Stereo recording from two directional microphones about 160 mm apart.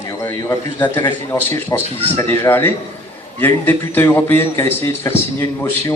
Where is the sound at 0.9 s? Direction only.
15° left (ahead or behind).